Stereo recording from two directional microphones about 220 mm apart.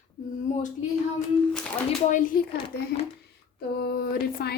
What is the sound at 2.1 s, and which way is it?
Speech, 35° left (ahead or behind).